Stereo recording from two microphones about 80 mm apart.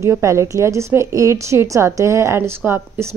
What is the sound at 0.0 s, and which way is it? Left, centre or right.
A woman's voice, right.